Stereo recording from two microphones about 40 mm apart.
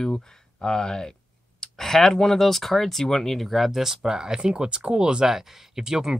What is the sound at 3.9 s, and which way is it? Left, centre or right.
Speech, centre.